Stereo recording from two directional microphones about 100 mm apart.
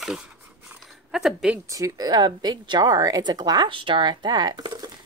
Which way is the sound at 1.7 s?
35° right (ahead or behind).